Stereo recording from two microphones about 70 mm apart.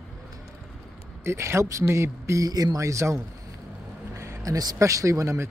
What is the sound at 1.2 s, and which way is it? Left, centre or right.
Speech, right.